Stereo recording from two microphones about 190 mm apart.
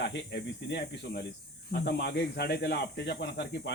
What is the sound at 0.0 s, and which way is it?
Speech, 65° left (ahead or behind).